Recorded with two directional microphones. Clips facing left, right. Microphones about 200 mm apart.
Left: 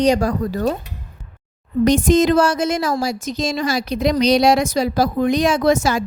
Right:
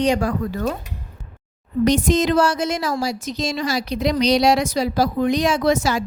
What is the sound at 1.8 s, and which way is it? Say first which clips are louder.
A woman's voice: left 4 dB; 50° left (ahead or behind).